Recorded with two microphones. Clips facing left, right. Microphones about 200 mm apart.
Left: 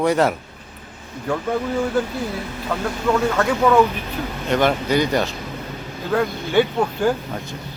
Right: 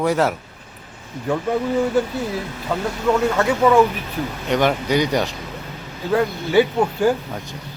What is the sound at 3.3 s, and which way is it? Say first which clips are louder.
Speech: right 1 dB; 10° right (ahead or behind).